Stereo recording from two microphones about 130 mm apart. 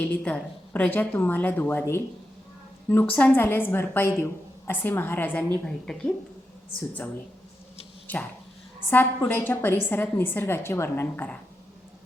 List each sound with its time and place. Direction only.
0.0 s a woman's voice: 10° left (ahead or behind)
8.0 s a sound: 15° left (ahead or behind)
8.9 s a woman's voice: 15° left (ahead or behind)